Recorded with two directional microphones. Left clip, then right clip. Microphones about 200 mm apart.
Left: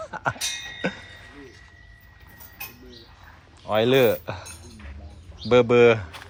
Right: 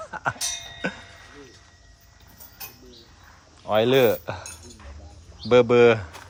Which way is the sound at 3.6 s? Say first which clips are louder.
Even; 15° right (ahead or behind).